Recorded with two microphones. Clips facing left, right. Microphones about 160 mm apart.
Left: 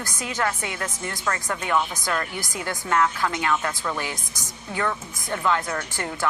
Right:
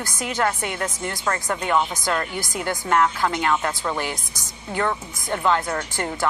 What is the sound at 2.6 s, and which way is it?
Speech, 50° right (ahead or behind).